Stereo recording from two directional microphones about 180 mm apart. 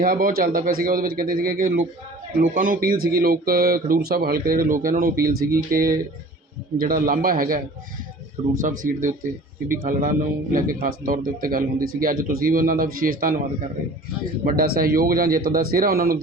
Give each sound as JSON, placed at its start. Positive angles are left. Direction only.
{"t": 0.0, "sound": "a man's voice", "side_deg": -55}
{"t": 8.6, "sound": "a man's voice", "side_deg": -45}
{"t": 14.4, "sound": "speech", "side_deg": -55}